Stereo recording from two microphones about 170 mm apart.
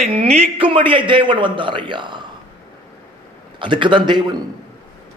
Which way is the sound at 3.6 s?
30° right (ahead or behind).